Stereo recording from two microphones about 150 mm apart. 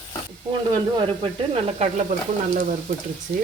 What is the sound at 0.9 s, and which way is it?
Speech, 40° right (ahead or behind).